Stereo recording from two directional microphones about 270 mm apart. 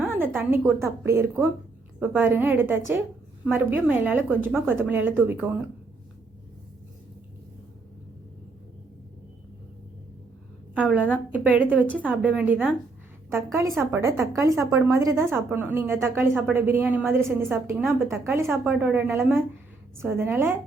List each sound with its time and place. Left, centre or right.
0.0 s a sound: centre
0.3 s a woman's voice: centre
10.8 s a woman's voice: centre
14.0 s a woman's voice: centre